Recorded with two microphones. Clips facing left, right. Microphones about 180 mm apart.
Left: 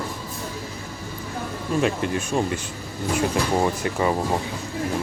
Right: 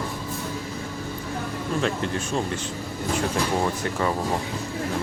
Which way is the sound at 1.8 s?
15° left (ahead or behind).